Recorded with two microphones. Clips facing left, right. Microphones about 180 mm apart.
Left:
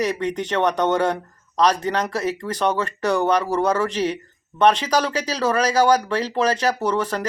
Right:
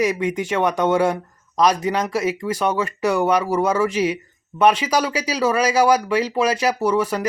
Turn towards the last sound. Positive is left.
turn(degrees=-10)  # may be behind; listen again after turning